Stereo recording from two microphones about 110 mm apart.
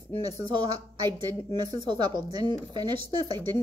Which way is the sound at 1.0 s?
40° right (ahead or behind).